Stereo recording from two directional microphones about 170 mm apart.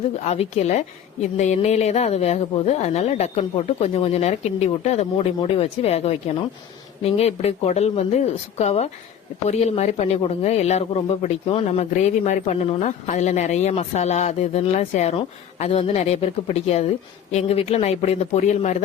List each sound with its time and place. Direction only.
0.2 s speech: 40° left (ahead or behind)